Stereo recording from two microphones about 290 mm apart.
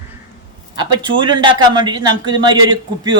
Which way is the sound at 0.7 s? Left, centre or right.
Centre.